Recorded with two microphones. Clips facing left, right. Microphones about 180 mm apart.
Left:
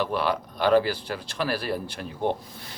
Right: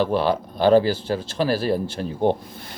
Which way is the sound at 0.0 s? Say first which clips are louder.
Right 5 dB; 30° right (ahead or behind).